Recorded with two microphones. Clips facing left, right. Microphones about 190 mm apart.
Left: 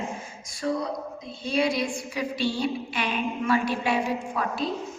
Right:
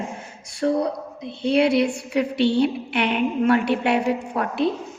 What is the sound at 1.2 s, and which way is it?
Speech, 65° right (ahead or behind).